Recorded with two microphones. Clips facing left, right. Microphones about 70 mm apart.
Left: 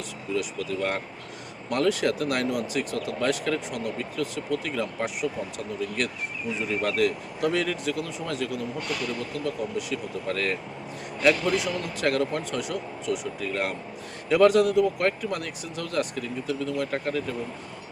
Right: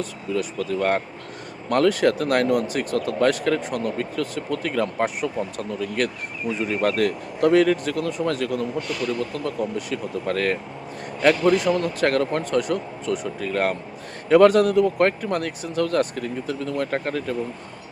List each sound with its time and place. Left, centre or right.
0.0 s speech: right